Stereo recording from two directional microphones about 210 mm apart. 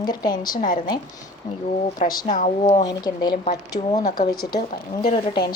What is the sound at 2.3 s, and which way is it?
Speech, 35° left (ahead or behind).